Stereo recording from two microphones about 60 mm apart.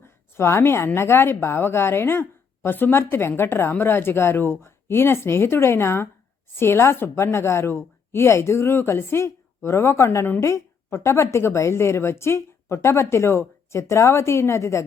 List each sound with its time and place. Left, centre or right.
0.3 s a woman's voice: left